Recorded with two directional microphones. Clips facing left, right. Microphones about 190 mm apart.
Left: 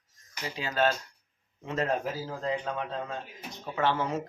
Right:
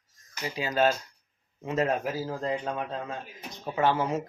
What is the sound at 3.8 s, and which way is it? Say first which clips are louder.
Speech: right 3 dB; 10° right (ahead or behind).